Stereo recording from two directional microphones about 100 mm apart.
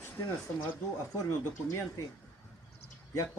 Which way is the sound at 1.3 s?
30° left (ahead or behind).